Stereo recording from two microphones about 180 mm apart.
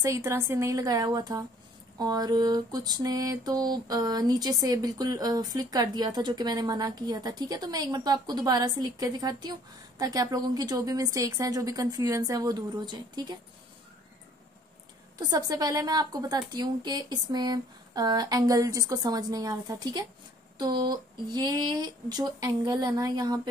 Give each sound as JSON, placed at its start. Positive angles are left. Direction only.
{"t": 0.0, "sound": "mantra", "side_deg": -15}
{"t": 15.1, "sound": "mantra", "side_deg": -20}